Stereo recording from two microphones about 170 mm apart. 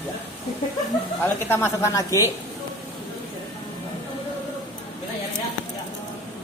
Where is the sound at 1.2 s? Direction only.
15° left (ahead or behind).